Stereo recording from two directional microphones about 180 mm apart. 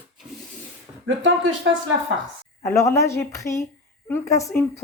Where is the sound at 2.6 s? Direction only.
15° left (ahead or behind).